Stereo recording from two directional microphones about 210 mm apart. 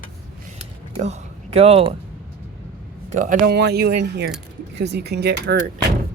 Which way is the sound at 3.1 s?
40° right (ahead or behind).